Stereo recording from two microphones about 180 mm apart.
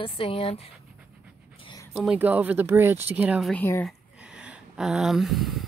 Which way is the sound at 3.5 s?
10° left (ahead or behind).